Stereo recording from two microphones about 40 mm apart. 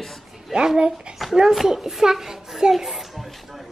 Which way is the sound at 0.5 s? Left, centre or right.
Right.